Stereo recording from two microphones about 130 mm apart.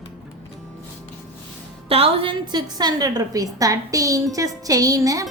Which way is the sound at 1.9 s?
45° right (ahead or behind).